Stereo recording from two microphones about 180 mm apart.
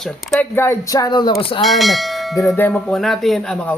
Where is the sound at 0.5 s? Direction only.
15° left (ahead or behind); by 1.6 s 30° left (ahead or behind).